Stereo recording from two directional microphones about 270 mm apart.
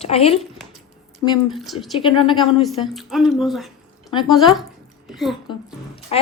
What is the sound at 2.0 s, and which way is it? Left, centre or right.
Speech, centre.